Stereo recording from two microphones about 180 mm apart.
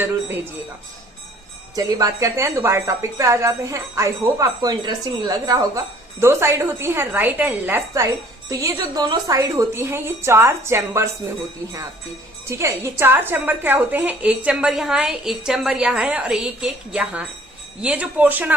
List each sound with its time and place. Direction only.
1.7 s a woman's voice: 20° right (ahead or behind)
12.5 s a woman's voice: 15° right (ahead or behind)